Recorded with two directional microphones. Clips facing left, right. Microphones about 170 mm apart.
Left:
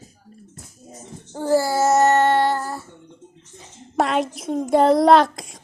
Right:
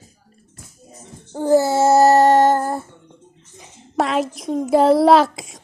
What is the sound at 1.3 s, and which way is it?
Child singing, 15° right (ahead or behind).